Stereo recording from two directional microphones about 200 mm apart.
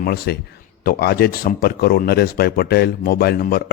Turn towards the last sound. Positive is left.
turn(degrees=45)  # may be behind; listen again after turning